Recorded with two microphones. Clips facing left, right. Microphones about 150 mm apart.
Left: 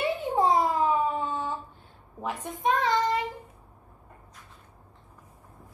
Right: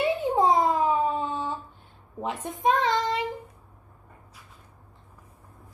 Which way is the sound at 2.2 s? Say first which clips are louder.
Right 3 dB; 20° right (ahead or behind).